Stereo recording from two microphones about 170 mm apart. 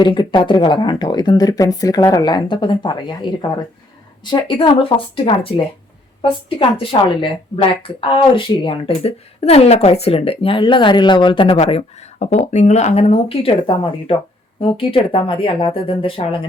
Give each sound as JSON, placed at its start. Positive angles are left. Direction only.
{"t": 0.0, "sound": "speech", "side_deg": 25}
{"t": 11.5, "sound": "speech", "side_deg": 40}